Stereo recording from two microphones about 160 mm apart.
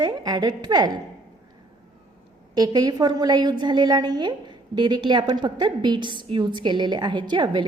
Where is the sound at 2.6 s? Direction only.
25° right (ahead or behind).